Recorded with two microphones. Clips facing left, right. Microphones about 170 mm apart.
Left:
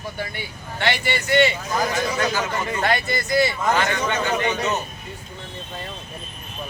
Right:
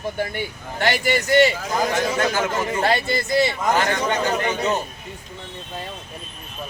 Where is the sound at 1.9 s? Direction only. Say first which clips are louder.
Right 2 dB; 50° right (ahead or behind).